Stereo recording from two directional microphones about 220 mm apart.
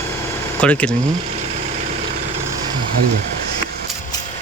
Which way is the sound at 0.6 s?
5° left (ahead or behind).